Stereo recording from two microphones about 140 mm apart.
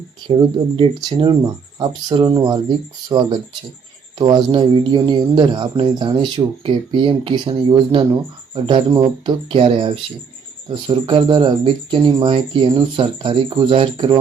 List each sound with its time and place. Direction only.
0.3 s speech: 35° right (ahead or behind)